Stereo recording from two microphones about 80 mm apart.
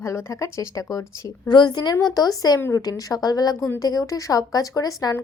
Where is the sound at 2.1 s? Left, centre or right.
Left.